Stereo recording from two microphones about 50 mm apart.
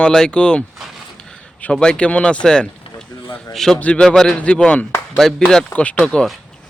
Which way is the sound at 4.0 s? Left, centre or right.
Centre.